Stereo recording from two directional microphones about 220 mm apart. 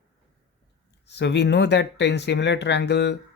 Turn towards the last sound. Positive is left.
turn(degrees=50)  # may be behind; listen again after turning